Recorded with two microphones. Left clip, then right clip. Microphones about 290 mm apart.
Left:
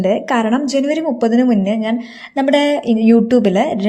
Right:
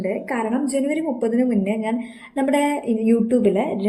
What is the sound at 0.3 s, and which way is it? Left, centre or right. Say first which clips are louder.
A woman's voice: left 7 dB; left.